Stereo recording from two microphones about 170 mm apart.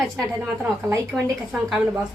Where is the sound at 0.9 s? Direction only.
20° right (ahead or behind).